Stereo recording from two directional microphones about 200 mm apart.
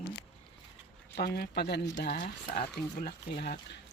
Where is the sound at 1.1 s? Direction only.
50° left (ahead or behind).